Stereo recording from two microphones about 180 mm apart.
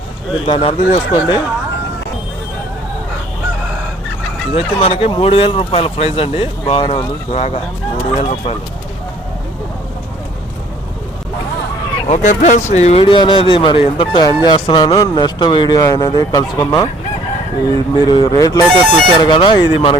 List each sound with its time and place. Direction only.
0.4 s speech: 30° left (ahead or behind)
4.5 s speech: 30° left (ahead or behind)
12.0 s speech: 45° left (ahead or behind)